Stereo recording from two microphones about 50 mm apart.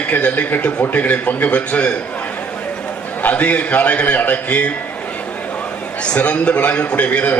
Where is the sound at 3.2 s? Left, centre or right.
Left.